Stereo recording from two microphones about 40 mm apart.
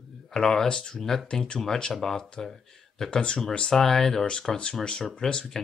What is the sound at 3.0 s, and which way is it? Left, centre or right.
Speech, left.